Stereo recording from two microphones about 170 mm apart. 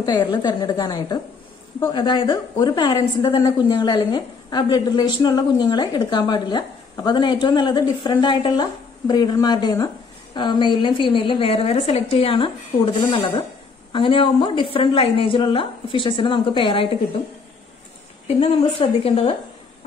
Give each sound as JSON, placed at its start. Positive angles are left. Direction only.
{"t": 0.3, "sound": "a woman's voice", "side_deg": 25}
{"t": 18.2, "sound": "a woman's voice", "side_deg": 40}